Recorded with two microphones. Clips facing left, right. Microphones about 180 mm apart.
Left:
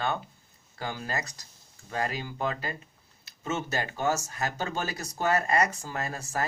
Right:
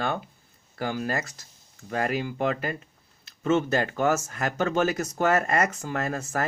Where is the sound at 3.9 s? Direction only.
50° right (ahead or behind).